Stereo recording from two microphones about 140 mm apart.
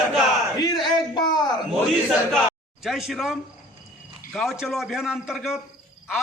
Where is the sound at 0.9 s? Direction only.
30° left (ahead or behind).